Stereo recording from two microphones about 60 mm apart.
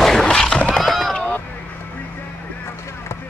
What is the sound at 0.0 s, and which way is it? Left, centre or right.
Neigh, centre.